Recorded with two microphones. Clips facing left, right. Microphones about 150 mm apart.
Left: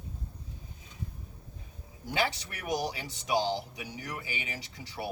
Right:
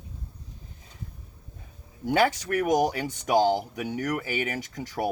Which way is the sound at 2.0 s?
50° right (ahead or behind).